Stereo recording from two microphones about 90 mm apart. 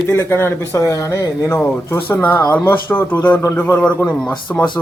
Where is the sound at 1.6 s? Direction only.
20° left (ahead or behind).